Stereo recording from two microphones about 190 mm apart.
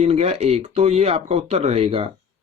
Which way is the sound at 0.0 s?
35° right (ahead or behind).